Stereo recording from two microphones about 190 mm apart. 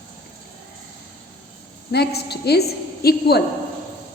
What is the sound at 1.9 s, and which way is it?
A woman's voice, 60° left (ahead or behind).